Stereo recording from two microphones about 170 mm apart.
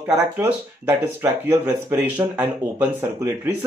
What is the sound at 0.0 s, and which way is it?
Speech, 15° right (ahead or behind).